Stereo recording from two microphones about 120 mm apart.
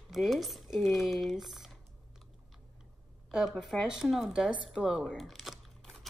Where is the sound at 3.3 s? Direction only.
5° right (ahead or behind).